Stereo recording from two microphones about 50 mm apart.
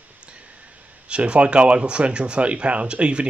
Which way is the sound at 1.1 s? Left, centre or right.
Right.